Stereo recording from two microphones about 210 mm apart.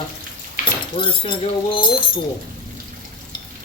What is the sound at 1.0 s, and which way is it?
Cutlery, 25° left (ahead or behind).